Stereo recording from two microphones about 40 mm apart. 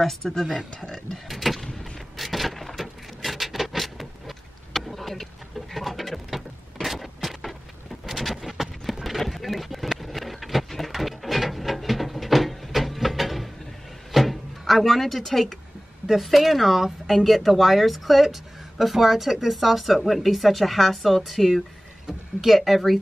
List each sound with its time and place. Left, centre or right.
0.0 s speech: centre
0.3 s speech: centre
1.3 s vehicle: centre
2.1 s a sound: centre
8.0 s vehicle: centre
9.0 s a sound: centre
16.1 s speech: centre